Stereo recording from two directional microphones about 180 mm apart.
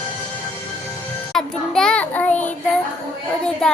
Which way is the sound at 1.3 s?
5° left (ahead or behind).